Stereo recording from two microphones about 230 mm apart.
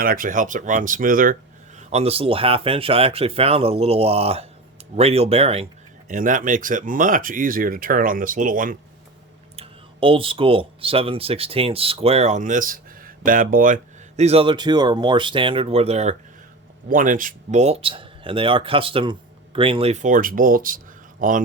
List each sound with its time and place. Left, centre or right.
0.0 s speech: right
1.9 s speech: right
9.6 s speech: right
14.2 s speech: right